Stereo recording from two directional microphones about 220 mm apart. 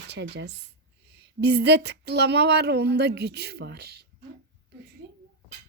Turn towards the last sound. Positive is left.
turn(degrees=-45)  # may be behind; listen again after turning